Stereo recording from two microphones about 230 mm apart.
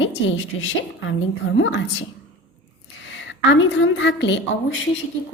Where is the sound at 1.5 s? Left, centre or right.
Left.